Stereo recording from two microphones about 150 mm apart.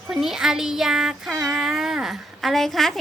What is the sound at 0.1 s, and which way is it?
A woman's voice, 5° right (ahead or behind).